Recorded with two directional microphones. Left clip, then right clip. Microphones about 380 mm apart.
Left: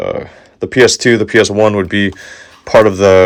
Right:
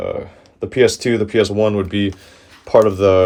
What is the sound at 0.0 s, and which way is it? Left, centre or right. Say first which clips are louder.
Speech: left 5 dB; left.